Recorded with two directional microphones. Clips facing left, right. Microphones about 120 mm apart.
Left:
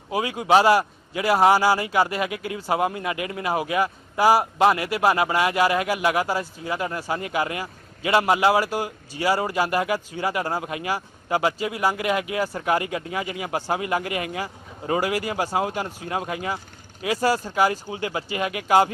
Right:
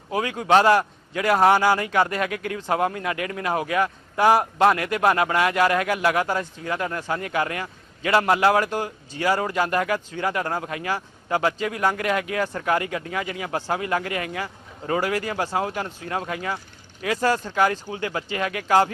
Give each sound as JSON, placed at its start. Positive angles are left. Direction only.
{"t": 0.1, "sound": "speech", "side_deg": 10}